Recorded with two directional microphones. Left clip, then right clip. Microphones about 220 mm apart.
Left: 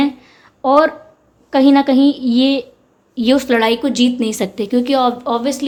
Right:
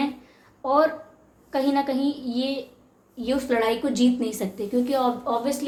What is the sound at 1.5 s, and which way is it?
A woman's voice, 45° left (ahead or behind).